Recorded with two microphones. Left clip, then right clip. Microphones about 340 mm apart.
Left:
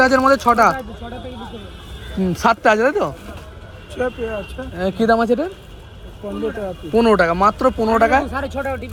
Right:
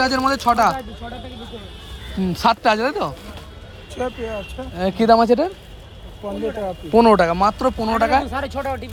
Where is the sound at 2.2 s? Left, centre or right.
Centre.